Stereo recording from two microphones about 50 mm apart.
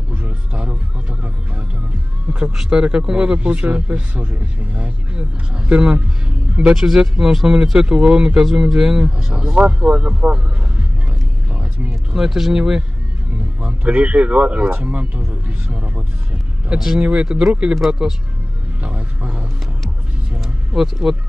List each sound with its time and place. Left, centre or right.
0.1 s music: right
2.2 s a sound: right
2.7 s speech: centre
6.6 s speech: centre
12.1 s speech: centre
13.6 s speech: right
16.6 s speech: centre
20.3 s speech: centre